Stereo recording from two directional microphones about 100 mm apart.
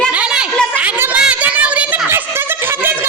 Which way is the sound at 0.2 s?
10° right (ahead or behind).